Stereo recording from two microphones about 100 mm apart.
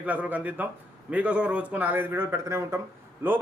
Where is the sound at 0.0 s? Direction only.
15° right (ahead or behind).